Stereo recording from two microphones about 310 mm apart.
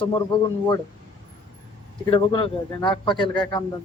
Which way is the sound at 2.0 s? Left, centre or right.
Centre.